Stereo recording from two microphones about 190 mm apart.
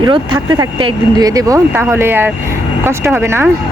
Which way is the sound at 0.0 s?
20° right (ahead or behind).